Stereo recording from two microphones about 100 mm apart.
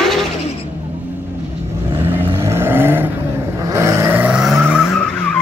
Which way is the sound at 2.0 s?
25° right (ahead or behind).